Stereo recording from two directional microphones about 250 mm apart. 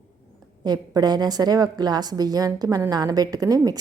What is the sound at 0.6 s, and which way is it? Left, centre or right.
A woman's voice, centre.